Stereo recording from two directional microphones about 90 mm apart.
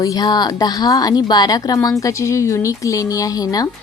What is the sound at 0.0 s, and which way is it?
Speech, 45° left (ahead or behind).